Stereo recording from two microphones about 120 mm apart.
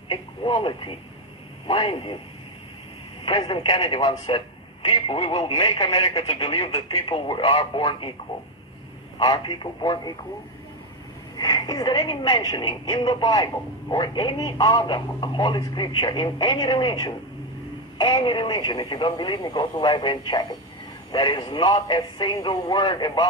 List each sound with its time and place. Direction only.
0.1 s speech: 45° left (ahead or behind)
3.3 s a woman's voice: 50° left (ahead or behind)
9.2 s a woman's voice: 40° left (ahead or behind)
11.3 s a woman's voice: 35° left (ahead or behind)